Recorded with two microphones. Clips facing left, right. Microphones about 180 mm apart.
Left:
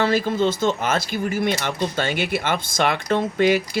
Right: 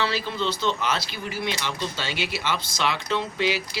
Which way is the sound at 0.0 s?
50° left (ahead or behind).